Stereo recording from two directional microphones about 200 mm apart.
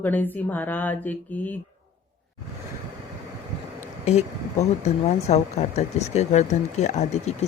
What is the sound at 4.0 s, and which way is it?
Speech, 35° left (ahead or behind).